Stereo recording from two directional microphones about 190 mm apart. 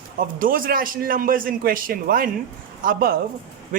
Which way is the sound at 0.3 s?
45° right (ahead or behind).